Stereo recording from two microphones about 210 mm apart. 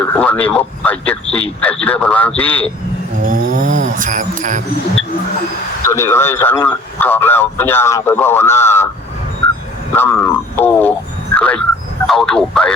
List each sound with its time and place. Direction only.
0.1 s speech: 10° left (ahead or behind)
3.2 s a sound: 40° right (ahead or behind)
5.8 s speech: 15° left (ahead or behind)
9.9 s speech: 10° left (ahead or behind)
11.3 s a sound: 5° left (ahead or behind)
12.0 s speech: centre (ahead or behind)